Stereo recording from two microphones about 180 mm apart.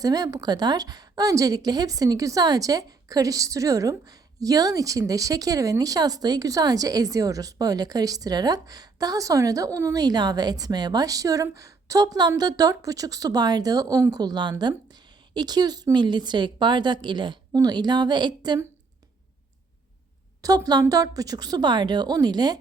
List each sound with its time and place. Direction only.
0.0 s a woman's voice: 20° right (ahead or behind)
20.4 s a woman's voice: 20° right (ahead or behind)